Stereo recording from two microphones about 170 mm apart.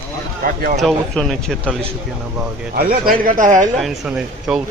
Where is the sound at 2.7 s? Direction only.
60° right (ahead or behind).